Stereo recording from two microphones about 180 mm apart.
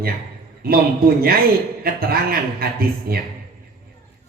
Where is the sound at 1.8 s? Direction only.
55° right (ahead or behind).